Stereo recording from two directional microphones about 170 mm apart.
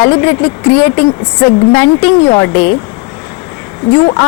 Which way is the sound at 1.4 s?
15° left (ahead or behind).